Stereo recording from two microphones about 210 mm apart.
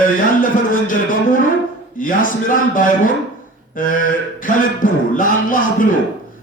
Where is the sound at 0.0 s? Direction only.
40° left (ahead or behind).